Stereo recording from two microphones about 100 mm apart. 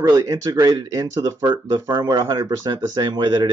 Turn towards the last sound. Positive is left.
turn(degrees=-45)  # may be behind; listen again after turning